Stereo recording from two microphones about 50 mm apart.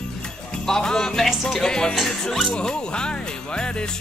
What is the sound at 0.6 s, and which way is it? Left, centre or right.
Music, centre.